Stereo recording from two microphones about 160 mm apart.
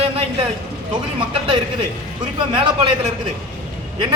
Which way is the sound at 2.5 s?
30° right (ahead or behind).